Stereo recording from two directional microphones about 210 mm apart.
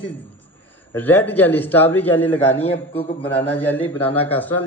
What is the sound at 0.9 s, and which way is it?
A man's voice, 10° left (ahead or behind).